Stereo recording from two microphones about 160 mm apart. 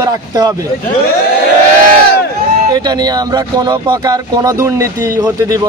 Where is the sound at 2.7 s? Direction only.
25° right (ahead or behind).